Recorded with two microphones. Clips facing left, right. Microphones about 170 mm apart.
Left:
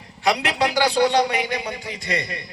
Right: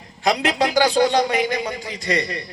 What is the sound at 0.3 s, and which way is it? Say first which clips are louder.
A man's voice: right 1 dB; 70° left (ahead or behind).